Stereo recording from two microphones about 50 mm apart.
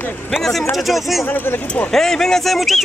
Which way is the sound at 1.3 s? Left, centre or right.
Left.